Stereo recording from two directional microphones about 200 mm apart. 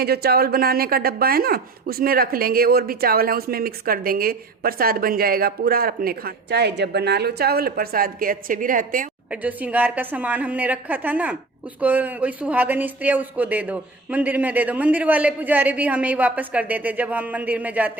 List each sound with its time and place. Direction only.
0.0 s speech: 50° right (ahead or behind)
9.3 s speech: 10° right (ahead or behind)